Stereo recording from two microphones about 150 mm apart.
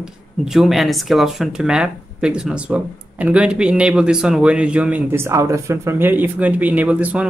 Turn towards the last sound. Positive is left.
turn(degrees=-10)  # may be behind; listen again after turning